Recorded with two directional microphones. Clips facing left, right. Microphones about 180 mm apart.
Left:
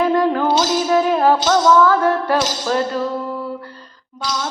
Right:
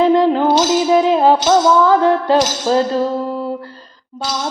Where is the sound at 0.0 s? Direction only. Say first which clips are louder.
Right 4 dB; 20° right (ahead or behind).